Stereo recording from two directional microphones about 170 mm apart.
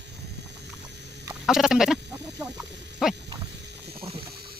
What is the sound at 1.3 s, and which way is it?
Chicken, 5° right (ahead or behind).